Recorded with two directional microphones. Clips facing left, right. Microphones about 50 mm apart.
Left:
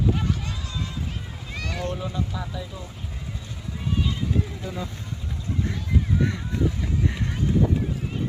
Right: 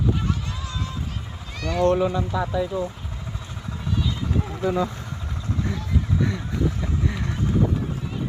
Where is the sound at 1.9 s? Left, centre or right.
Right.